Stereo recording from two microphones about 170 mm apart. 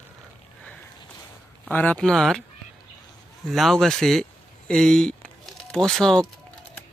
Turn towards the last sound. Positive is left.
turn(degrees=5)  # may be behind; listen again after turning